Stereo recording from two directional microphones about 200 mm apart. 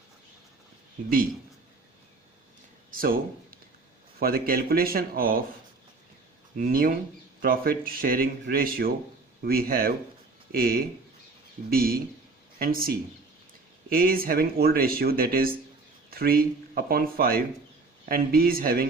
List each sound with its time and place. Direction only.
2.9 s a sound: 45° right (ahead or behind)
4.2 s speech: 50° right (ahead or behind)
6.6 s speech: 45° right (ahead or behind)